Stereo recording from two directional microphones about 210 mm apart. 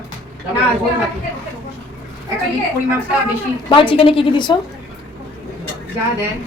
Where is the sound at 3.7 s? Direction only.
25° left (ahead or behind).